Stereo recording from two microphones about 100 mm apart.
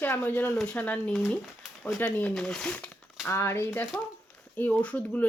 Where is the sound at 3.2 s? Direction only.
25° left (ahead or behind).